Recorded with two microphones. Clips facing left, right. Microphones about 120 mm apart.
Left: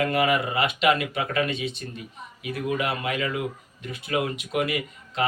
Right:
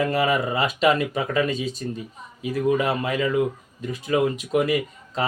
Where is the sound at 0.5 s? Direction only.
35° right (ahead or behind).